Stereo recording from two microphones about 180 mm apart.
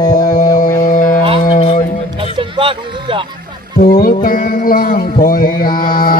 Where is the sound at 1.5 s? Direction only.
30° left (ahead or behind).